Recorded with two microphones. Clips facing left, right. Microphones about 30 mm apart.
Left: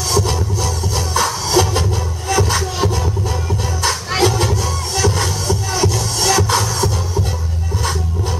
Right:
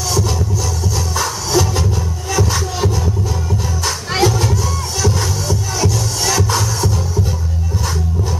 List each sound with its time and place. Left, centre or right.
1.1 s music: centre
4.2 s music: centre
5.9 s music: centre